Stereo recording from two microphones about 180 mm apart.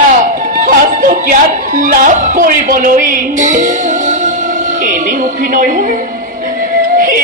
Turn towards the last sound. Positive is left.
turn(degrees=-50)  # may be behind; listen again after turning